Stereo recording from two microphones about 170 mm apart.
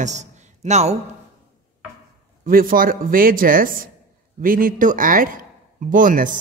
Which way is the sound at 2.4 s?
55° right (ahead or behind).